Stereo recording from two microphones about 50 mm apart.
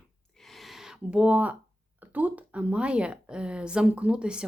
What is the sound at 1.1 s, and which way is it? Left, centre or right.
Speech, right.